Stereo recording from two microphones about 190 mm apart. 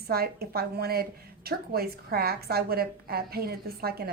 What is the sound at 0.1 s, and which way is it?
A woman's voice, 55° right (ahead or behind).